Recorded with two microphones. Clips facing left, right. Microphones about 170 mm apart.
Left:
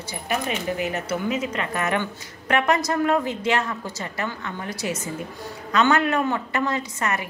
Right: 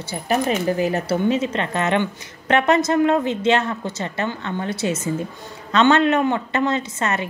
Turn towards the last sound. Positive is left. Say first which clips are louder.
# right 3 dB
turn(degrees=-25)  # may be behind; listen again after turning